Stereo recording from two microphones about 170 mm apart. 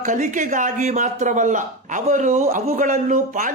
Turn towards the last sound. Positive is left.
turn(degrees=-50)  # may be behind; listen again after turning